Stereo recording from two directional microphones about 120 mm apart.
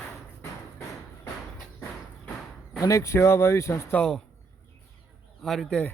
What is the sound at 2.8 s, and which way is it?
Speech, 25° left (ahead or behind).